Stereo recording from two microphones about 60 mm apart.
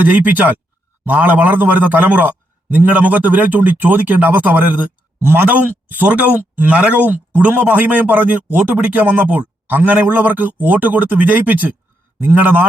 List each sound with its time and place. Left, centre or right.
0.0 s speech: right
5.2 s a man's voice: right